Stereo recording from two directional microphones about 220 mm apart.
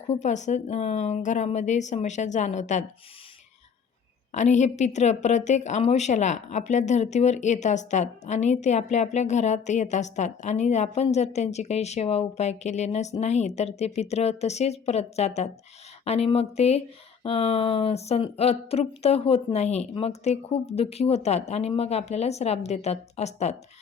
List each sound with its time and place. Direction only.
0.1 s a woman's voice: 30° left (ahead or behind)
4.3 s a woman's voice: 30° left (ahead or behind)